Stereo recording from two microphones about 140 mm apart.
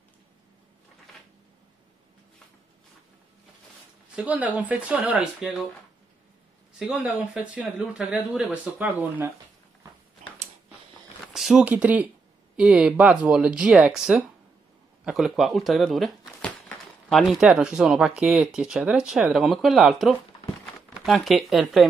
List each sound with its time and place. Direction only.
4.1 s speech: 10° right (ahead or behind)
6.8 s speech: 5° right (ahead or behind)
11.3 s speech: 5° right (ahead or behind)